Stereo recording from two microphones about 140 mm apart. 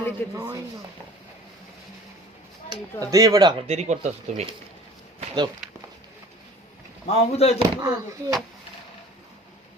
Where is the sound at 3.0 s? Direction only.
25° right (ahead or behind).